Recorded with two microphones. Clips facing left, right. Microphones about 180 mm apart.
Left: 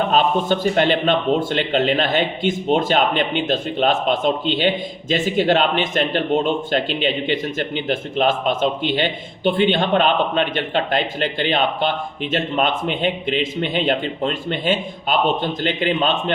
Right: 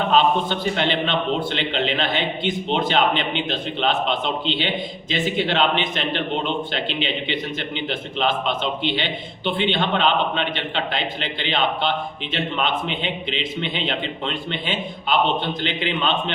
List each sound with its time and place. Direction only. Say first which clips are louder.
0.1 s a man's voice: left 1 dB; 45° left (ahead or behind)